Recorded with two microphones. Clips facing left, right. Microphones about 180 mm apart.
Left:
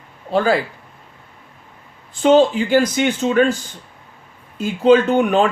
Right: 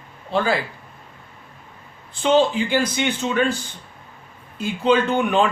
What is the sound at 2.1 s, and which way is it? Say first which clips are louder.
Speech: left 5 dB; 45° left (ahead or behind).